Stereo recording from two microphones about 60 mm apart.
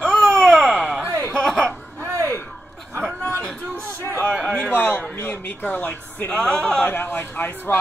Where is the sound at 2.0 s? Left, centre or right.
Right.